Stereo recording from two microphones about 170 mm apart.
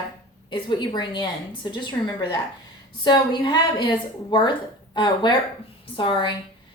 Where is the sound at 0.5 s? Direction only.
25° left (ahead or behind).